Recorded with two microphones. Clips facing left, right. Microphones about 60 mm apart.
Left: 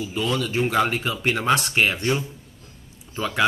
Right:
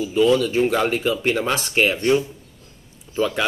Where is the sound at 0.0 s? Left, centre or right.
Centre.